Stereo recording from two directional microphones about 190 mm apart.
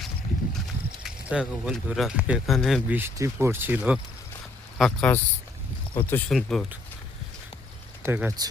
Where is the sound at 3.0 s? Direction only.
15° right (ahead or behind).